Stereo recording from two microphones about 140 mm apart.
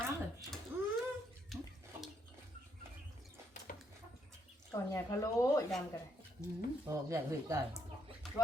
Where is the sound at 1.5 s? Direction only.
Centre (ahead or behind).